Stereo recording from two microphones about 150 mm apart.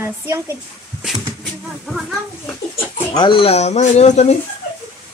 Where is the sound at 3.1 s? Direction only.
30° left (ahead or behind); by 4.4 s 50° left (ahead or behind).